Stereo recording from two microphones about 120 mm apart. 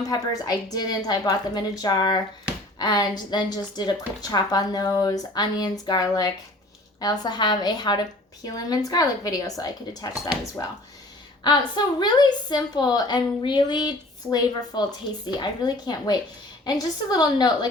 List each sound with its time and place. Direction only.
0.0 s a woman's voice: 30° left (ahead or behind)
11.4 s a woman's voice: 40° left (ahead or behind)